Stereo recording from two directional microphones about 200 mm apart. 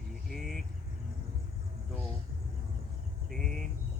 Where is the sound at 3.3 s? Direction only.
Centre (ahead or behind).